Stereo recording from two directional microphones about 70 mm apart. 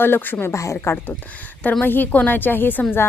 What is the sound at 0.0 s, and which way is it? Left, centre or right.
Speech, left.